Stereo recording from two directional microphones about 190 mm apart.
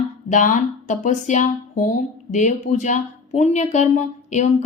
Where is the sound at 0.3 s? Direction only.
40° left (ahead or behind).